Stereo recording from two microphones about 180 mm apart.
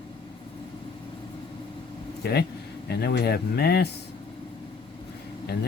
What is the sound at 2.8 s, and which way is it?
Speech, 65° left (ahead or behind).